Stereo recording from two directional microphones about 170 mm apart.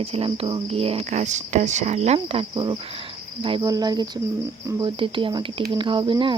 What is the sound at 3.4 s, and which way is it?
Speech, 30° right (ahead or behind).